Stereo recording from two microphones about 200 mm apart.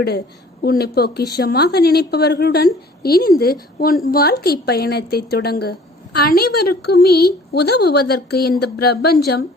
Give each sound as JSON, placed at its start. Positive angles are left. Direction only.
{"t": 0.6, "sound": "a woman's voice", "side_deg": 50}